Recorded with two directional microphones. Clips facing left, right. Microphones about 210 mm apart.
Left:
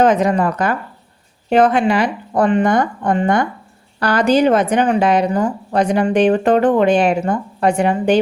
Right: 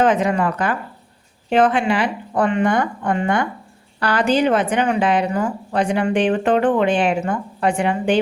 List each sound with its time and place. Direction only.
0.0 s a woman's voice: 40° left (ahead or behind)